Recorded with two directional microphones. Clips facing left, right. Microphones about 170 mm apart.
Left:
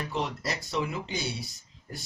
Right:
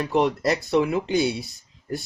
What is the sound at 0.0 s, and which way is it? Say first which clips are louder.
Speech: right 11 dB; 60° right (ahead or behind).